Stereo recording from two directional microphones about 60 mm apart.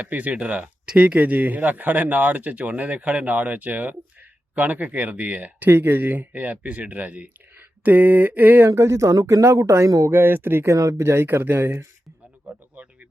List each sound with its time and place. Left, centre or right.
0.0 s speech: right
8.6 s speech: right
9.4 s speech: right
10.1 s speech: right
10.7 s speech: right
11.0 s speech: right
12.5 s a sound: right